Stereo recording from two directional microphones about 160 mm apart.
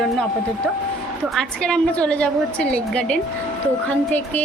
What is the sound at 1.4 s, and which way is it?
A woman's voice, 5° left (ahead or behind).